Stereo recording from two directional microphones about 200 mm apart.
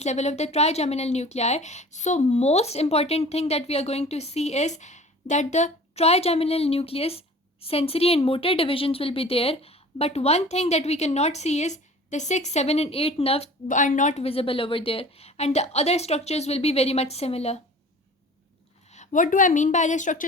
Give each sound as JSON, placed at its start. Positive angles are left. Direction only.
{"t": 0.0, "sound": "speech", "side_deg": 35}
{"t": 18.9, "sound": "a woman's voice", "side_deg": 40}